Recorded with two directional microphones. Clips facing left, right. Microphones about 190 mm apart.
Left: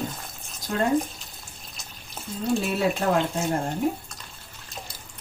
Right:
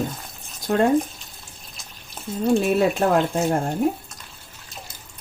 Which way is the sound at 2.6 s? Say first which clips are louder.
Right 5 dB; 50° right (ahead or behind).